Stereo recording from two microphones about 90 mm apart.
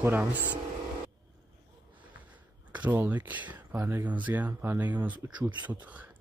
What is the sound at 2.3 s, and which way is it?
Speech, 15° right (ahead or behind).